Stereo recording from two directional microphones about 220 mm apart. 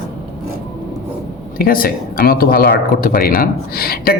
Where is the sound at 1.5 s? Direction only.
40° left (ahead or behind).